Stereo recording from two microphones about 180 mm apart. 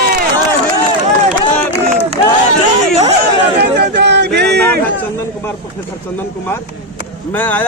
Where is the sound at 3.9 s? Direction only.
70° right (ahead or behind).